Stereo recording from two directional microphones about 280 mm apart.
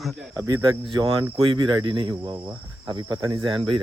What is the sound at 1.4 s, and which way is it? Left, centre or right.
Cricket, centre.